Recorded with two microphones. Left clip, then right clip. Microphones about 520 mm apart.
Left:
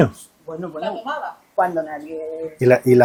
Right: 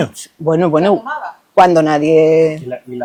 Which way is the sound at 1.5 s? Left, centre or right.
Right.